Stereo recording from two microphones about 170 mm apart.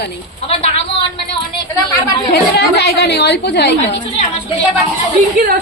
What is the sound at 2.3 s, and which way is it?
A woman's voice, 70° left (ahead or behind).